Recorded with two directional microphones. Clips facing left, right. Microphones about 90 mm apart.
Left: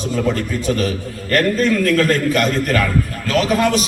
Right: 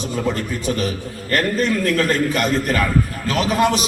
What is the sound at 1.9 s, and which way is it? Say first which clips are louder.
A man's voice: left 3 dB; 20° right (ahead or behind).